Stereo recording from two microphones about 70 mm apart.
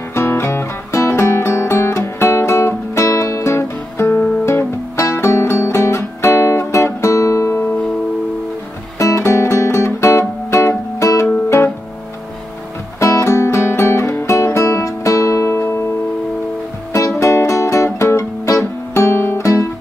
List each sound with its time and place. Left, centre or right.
0.1 s music: left
8.9 s music: left
11.2 s guitar: left
13.0 s music: left
17.2 s music: left
18.0 s guitar: left